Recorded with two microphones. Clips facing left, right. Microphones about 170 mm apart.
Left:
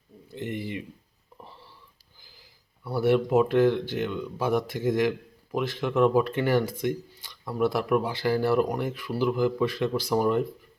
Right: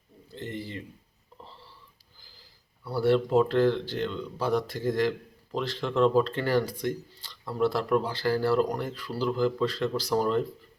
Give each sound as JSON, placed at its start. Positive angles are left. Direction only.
{"t": 0.3, "sound": "speech", "side_deg": 20}
{"t": 2.8, "sound": "speech", "side_deg": 20}